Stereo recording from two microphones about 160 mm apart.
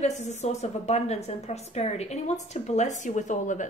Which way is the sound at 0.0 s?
45° left (ahead or behind).